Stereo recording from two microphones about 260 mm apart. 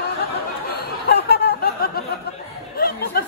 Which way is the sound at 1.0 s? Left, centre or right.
Left.